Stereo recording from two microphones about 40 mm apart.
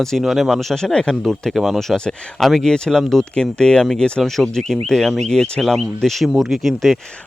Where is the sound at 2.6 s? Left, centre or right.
Centre.